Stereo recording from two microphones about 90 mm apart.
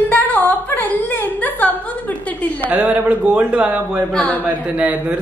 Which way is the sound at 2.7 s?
20° right (ahead or behind).